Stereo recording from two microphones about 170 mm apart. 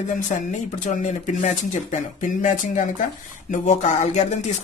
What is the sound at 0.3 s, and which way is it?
Speech, 45° left (ahead or behind).